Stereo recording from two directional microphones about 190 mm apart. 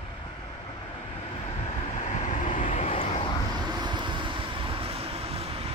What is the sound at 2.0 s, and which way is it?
Vehicle, 45° left (ahead or behind).